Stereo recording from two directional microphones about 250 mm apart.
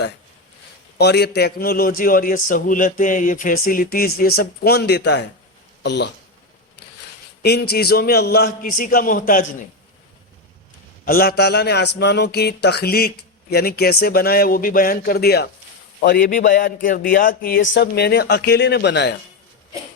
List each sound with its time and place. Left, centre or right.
0.9 s a man's voice: left
7.7 s a man's voice: left
11.0 s a man's voice: left